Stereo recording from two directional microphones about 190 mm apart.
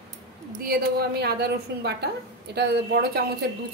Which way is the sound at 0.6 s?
55° right (ahead or behind).